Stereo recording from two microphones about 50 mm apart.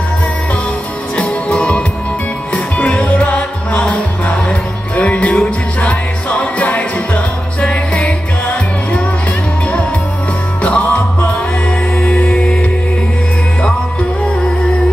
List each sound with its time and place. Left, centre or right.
1.1 s music: left
10.6 s music: left